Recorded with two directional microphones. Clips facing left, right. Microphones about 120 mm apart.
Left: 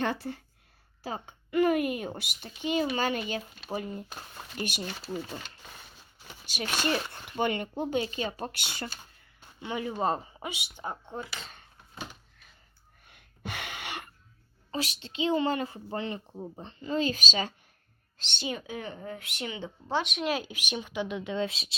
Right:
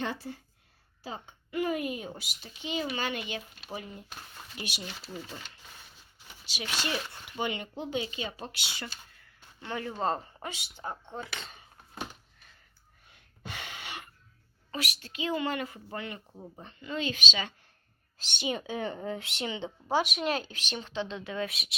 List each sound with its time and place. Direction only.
0.0 s a child's voice: 60° left (ahead or behind); by 5.1 s 45° left (ahead or behind)
6.4 s a child's voice: 50° left (ahead or behind)
9.2 s speech: 15° left (ahead or behind)
13.1 s gasp: 65° left (ahead or behind)
14.7 s a woman's voice: 30° left (ahead or behind)
18.2 s a woman's voice: 10° right (ahead or behind)
18.4 s speech: 30° right (ahead or behind)
19.9 s a woman's voice: 5° right (ahead or behind); by 21.8 s 30° left (ahead or behind)